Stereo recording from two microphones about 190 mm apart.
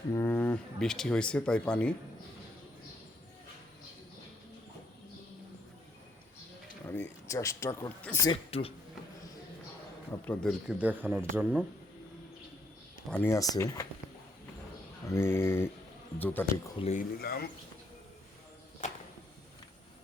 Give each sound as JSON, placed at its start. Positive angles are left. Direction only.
{"t": 0.1, "sound": "speech", "side_deg": 10}
{"t": 6.8, "sound": "speech", "side_deg": 10}
{"t": 8.3, "sound": "speech", "side_deg": 30}
{"t": 10.1, "sound": "speech", "side_deg": 10}
{"t": 10.7, "sound": "speech", "side_deg": -10}
{"t": 13.1, "sound": "speech", "side_deg": 10}
{"t": 15.1, "sound": "speech", "side_deg": 15}
{"t": 16.8, "sound": "speech", "side_deg": 45}
{"t": 18.8, "sound": "music", "side_deg": 40}